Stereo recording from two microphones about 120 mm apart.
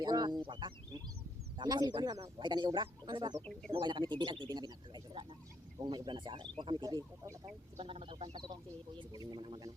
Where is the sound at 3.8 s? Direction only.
40° right (ahead or behind).